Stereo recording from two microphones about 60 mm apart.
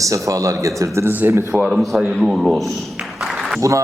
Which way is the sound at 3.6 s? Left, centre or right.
Right.